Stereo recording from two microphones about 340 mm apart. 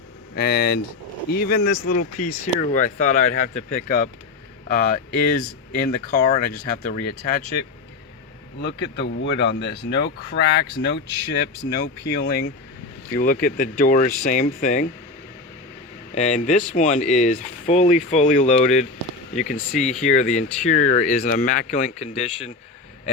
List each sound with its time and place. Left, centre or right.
0.3 s speech: left
8.6 s speech: left
16.1 s speech: left